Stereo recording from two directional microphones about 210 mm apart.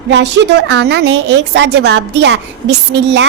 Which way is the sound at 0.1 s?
60° right (ahead or behind).